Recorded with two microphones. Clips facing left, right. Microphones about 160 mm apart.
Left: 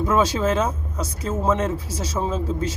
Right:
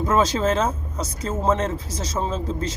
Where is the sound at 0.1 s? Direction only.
10° left (ahead or behind).